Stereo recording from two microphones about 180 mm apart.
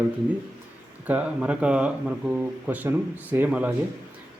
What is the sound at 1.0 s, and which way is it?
Speech, 5° right (ahead or behind).